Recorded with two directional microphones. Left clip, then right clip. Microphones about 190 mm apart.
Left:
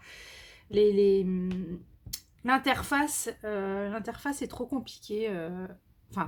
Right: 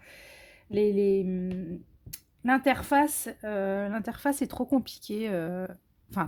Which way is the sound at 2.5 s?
30° right (ahead or behind).